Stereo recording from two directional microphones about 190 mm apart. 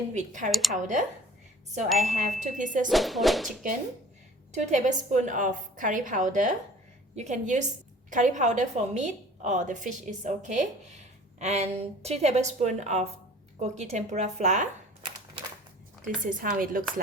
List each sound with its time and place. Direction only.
0.1 s a woman's voice: 40° right (ahead or behind)
0.5 s speech: centre (ahead or behind)
0.8 s a woman's voice: 40° right (ahead or behind)
2.9 s speech: centre (ahead or behind)
4.5 s a woman's voice: 40° right (ahead or behind)
16.2 s a woman's voice: 45° right (ahead or behind)